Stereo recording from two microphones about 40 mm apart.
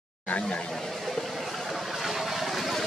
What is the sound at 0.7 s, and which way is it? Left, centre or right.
Vehicle, centre.